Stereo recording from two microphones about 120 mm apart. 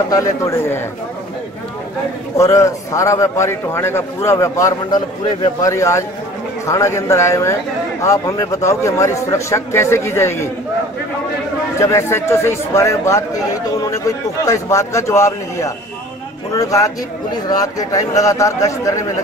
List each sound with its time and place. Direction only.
0.1 s a man's voice: 25° left (ahead or behind)
2.3 s a man's voice: 25° left (ahead or behind)
11.8 s a man's voice: 25° left (ahead or behind)